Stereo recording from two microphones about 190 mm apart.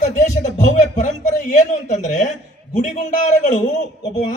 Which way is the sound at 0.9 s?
40° left (ahead or behind).